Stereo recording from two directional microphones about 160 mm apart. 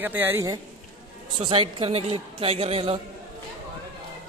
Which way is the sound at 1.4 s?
35° right (ahead or behind).